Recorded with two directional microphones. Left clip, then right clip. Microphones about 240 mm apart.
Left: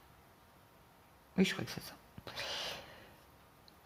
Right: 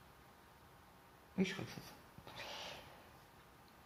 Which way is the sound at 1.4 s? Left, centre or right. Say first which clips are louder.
Left 7 dB; left.